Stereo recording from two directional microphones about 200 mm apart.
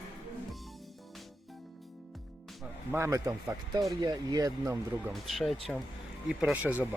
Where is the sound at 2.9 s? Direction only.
15° right (ahead or behind).